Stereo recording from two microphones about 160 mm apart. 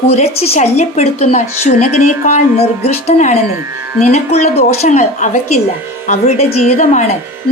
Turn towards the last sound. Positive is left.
turn(degrees=45)  # may be behind; listen again after turning